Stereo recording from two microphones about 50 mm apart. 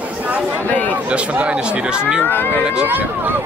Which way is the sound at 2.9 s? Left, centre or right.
Right.